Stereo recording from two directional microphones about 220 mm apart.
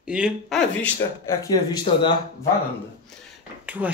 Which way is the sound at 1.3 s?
15° left (ahead or behind).